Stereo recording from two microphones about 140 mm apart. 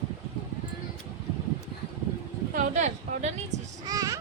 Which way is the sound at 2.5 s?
55° right (ahead or behind).